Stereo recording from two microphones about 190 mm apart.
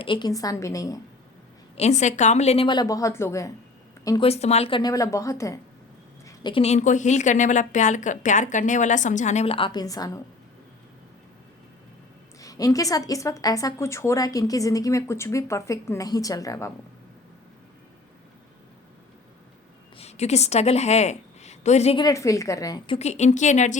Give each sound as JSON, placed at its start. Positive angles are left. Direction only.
{"t": 0.0, "sound": "a woman's voice", "side_deg": 25}
{"t": 1.7, "sound": "a woman's voice", "side_deg": 35}
{"t": 4.3, "sound": "a woman's voice", "side_deg": 35}
{"t": 12.4, "sound": "a woman's voice", "side_deg": 20}
{"t": 20.0, "sound": "a woman's voice", "side_deg": 35}
{"t": 22.0, "sound": "a woman's voice", "side_deg": 15}
{"t": 23.0, "sound": "a woman's voice", "side_deg": 35}